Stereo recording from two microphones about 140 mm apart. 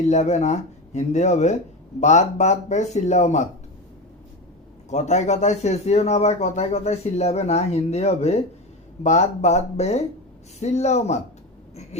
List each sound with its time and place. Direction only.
0.0 s speech: 55° left (ahead or behind)
4.9 s a man's voice: 55° left (ahead or behind)